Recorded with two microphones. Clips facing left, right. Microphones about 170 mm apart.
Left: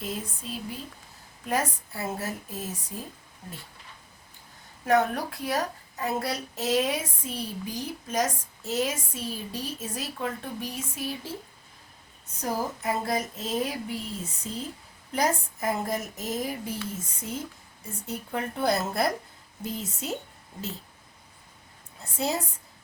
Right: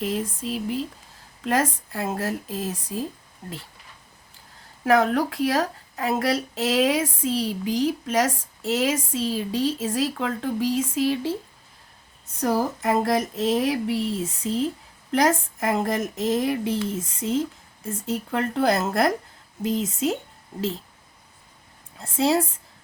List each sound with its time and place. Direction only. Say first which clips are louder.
0.0 s speech: right 8 dB; 90° right
4.9 s speech: right 4 dB; 90° right
12.4 s speech: right 7 dB; 90° right
22.0 s speech: right 8 dB; 90° right